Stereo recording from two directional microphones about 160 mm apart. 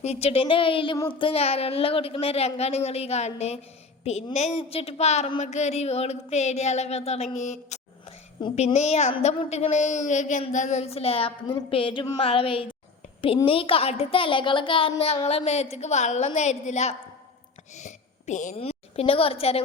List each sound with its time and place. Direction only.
0.0 s a woman's voice: 40° left (ahead or behind)
4.0 s a sound: 45° left (ahead or behind)
8.5 s a woman's voice: 45° left (ahead or behind)